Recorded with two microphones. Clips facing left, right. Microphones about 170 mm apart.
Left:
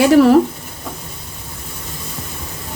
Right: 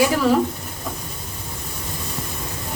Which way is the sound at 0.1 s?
65° left (ahead or behind).